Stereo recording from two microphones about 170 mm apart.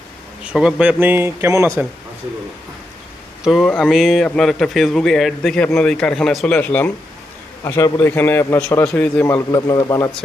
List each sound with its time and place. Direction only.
0.4 s speech: 5° right (ahead or behind)
3.4 s a man's voice: centre (ahead or behind); by 10.1 s 20° left (ahead or behind)